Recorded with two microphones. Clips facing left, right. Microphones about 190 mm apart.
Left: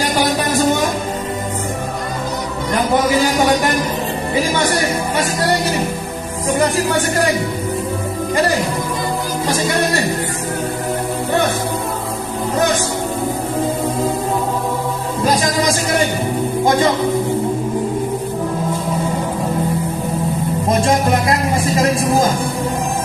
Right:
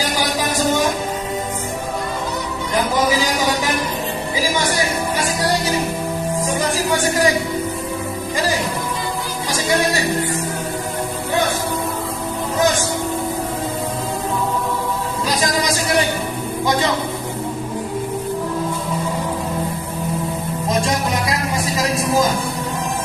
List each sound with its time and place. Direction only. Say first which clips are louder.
0.1 s music: left 4 dB; 65° left (ahead or behind)
2.7 s a sound: left 3 dB; 60° left (ahead or behind)
4.6 s music: left 3 dB; 60° left (ahead or behind)
6.6 s speech: left 5 dB; 60° left (ahead or behind)
20.8 s music: left 5 dB; 55° left (ahead or behind)